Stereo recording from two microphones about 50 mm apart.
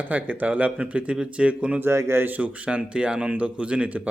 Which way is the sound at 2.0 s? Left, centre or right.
Right.